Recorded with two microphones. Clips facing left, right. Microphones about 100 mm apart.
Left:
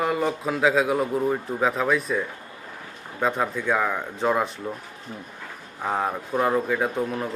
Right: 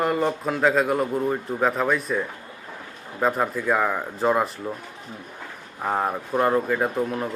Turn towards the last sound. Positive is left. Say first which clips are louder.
# right 1 dB
turn(degrees=0)  # may be behind; listen again after turning